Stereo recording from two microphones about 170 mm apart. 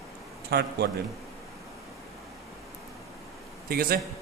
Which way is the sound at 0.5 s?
70° right (ahead or behind).